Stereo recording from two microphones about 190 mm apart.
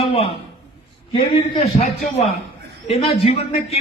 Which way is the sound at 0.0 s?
30° left (ahead or behind).